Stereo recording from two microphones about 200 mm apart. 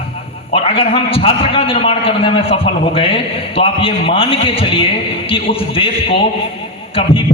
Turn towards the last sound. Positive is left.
turn(degrees=25)  # may be behind; listen again after turning